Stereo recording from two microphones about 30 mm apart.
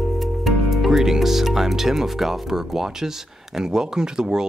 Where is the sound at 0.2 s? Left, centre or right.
Centre.